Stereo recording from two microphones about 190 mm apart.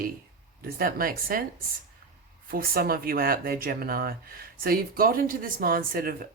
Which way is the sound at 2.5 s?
50° right (ahead or behind).